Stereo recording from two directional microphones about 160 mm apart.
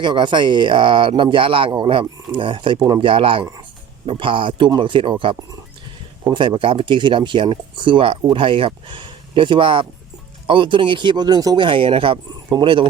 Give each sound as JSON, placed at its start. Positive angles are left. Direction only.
{"t": 0.0, "sound": "speech", "side_deg": -30}
{"t": 6.2, "sound": "speech", "side_deg": -30}